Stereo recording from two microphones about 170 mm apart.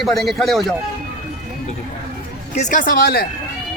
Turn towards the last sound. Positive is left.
turn(degrees=60)  # may be behind; listen again after turning